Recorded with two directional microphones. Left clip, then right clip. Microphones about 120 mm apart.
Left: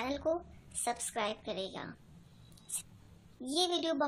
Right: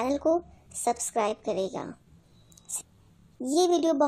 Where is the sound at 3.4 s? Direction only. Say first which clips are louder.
Right 9 dB; 40° right (ahead or behind).